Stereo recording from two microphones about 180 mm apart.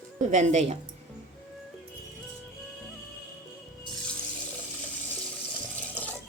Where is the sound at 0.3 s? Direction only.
40° right (ahead or behind).